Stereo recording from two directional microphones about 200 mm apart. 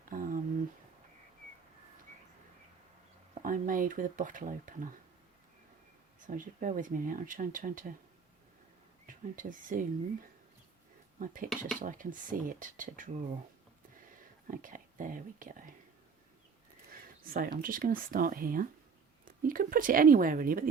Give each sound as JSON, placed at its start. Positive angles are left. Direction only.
{"t": 0.1, "sound": "a sound", "side_deg": -45}
{"t": 3.3, "sound": "speech", "side_deg": -40}
{"t": 6.2, "sound": "speech", "side_deg": -40}
{"t": 9.0, "sound": "speech", "side_deg": -40}
{"t": 14.4, "sound": "speech", "side_deg": -40}
{"t": 16.9, "sound": "a sound", "side_deg": -45}
{"t": 17.6, "sound": "speech", "side_deg": -45}